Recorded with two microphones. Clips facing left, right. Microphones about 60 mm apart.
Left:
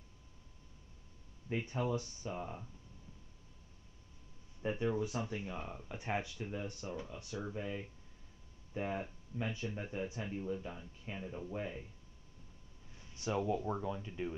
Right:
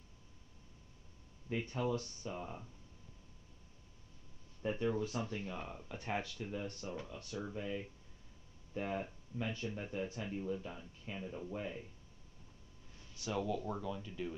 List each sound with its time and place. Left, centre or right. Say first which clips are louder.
1.5 s speech: left 1 dB; centre
4.6 s speech: left 1 dB; centre
5.9 s speech: left 1 dB; centre
13.0 s speech: left 2 dB; left